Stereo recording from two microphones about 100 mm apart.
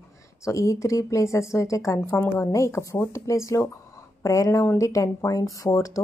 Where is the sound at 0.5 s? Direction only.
30° left (ahead or behind).